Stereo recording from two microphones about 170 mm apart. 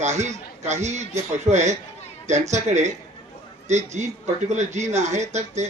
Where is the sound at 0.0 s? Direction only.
45° right (ahead or behind).